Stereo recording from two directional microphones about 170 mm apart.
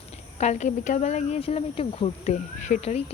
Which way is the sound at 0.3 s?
40° left (ahead or behind).